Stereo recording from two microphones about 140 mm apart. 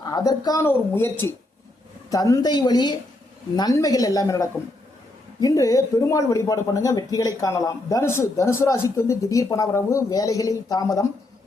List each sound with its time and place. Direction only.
0.0 s a woman's voice: 25° left (ahead or behind)